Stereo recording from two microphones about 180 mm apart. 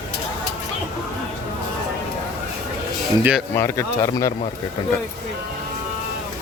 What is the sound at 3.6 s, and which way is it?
Speech, 15° left (ahead or behind).